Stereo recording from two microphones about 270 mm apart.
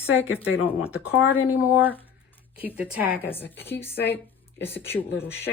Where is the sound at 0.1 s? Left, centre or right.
Left.